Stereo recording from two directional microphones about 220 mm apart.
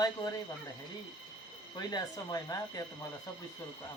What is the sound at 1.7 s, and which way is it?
Speech, 15° left (ahead or behind).